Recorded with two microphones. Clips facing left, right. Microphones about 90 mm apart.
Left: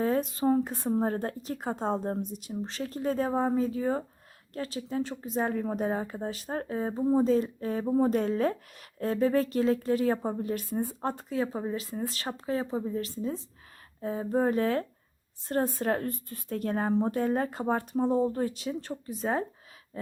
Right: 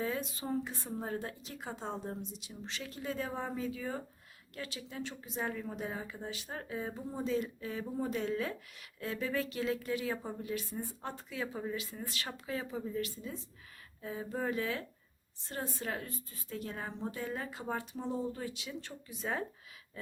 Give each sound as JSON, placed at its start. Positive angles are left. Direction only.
{"t": 0.0, "sound": "a woman's voice", "side_deg": 45}